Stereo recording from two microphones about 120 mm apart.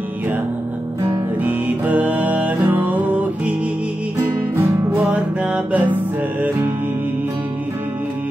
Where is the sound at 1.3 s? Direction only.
15° right (ahead or behind).